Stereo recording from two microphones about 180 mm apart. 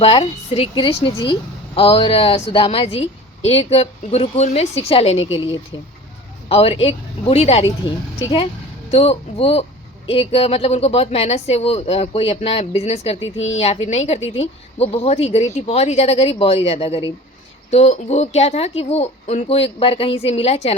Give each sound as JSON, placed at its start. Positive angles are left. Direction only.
{"t": 0.0, "sound": "a woman's voice", "side_deg": 30}
{"t": 8.9, "sound": "a woman's voice", "side_deg": 35}